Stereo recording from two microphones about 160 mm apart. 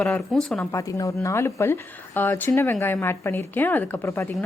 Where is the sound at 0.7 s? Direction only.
20° left (ahead or behind).